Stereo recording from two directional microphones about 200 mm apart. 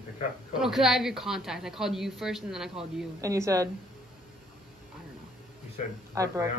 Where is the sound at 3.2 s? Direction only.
15° right (ahead or behind).